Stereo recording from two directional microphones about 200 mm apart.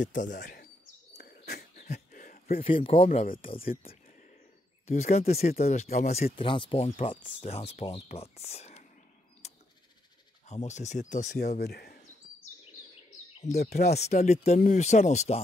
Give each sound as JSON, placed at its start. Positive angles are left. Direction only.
{"t": 0.0, "sound": "speech", "side_deg": 40}
{"t": 1.1, "sound": "dog", "side_deg": 50}
{"t": 1.9, "sound": "a sound", "side_deg": 40}
{"t": 2.6, "sound": "speech", "side_deg": 25}
{"t": 3.1, "sound": "speech", "side_deg": 45}
{"t": 4.8, "sound": "speech", "side_deg": 35}
{"t": 5.9, "sound": "speech", "side_deg": 45}
{"t": 6.3, "sound": "speech", "side_deg": 25}
{"t": 9.4, "sound": "a sound", "side_deg": 35}
{"t": 10.4, "sound": "speech", "side_deg": 35}
{"t": 11.6, "sound": "speech", "side_deg": 50}
{"t": 13.5, "sound": "speech", "side_deg": 50}
{"t": 13.9, "sound": "speech", "side_deg": 35}